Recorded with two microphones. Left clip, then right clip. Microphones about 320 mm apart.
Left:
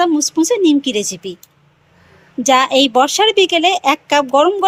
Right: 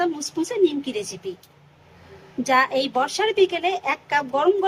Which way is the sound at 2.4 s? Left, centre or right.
Centre.